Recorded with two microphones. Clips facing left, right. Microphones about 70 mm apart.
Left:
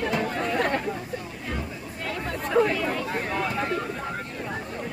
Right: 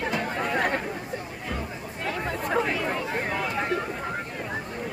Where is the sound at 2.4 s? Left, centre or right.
Centre.